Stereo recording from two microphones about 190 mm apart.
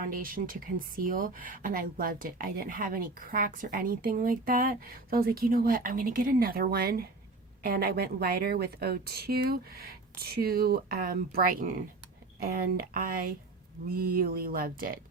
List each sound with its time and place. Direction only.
0.1 s speech: 45° right (ahead or behind)